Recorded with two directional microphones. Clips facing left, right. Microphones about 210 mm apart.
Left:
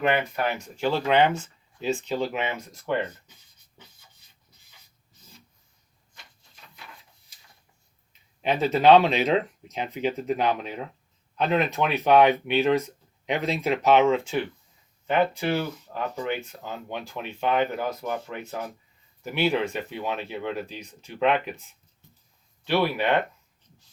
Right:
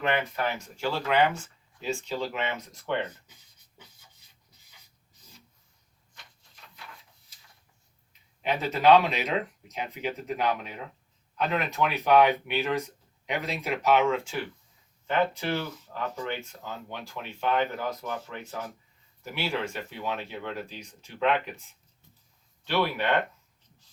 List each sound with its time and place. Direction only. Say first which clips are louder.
0.0 s speech: left 3 dB; 10° left (ahead or behind)
8.4 s speech: left 5 dB; 25° left (ahead or behind)
22.6 s speech: left 3 dB; 15° left (ahead or behind)